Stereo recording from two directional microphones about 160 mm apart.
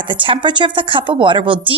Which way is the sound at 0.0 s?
30° right (ahead or behind).